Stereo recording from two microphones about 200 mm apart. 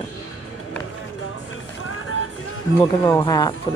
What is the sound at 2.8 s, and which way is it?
Speech, 20° left (ahead or behind).